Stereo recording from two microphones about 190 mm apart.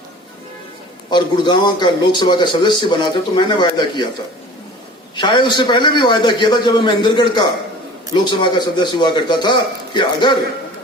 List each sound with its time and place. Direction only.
1.1 s a man's voice: 25° left (ahead or behind)
5.1 s a man's voice: 25° left (ahead or behind)